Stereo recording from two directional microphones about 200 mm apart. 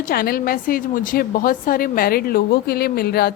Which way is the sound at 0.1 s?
50° left (ahead or behind).